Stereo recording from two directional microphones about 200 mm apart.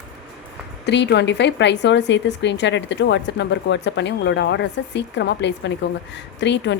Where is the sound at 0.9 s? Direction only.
60° left (ahead or behind).